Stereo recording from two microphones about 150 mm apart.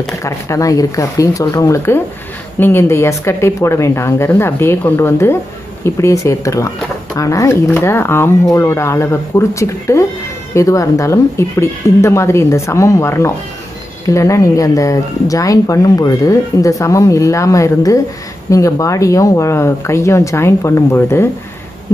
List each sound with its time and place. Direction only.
0.2 s speech: 20° left (ahead or behind)